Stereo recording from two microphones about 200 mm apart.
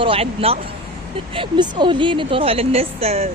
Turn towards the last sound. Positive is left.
turn(degrees=-30)  # may be behind; listen again after turning